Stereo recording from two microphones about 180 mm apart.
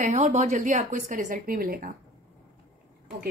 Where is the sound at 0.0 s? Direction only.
40° right (ahead or behind).